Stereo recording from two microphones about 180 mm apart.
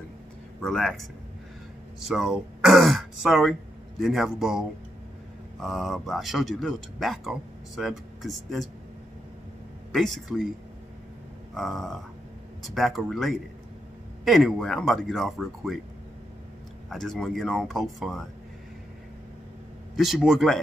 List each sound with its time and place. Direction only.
0.6 s speech: centre (ahead or behind)
2.0 s speech: centre (ahead or behind)
9.9 s speech: centre (ahead or behind)
11.5 s speech: centre (ahead or behind)
16.9 s speech: centre (ahead or behind)
20.0 s speech: centre (ahead or behind)